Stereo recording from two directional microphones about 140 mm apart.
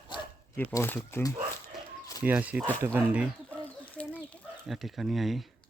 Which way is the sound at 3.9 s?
10° left (ahead or behind).